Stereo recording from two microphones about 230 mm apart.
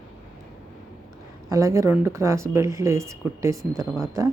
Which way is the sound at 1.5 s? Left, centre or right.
Centre.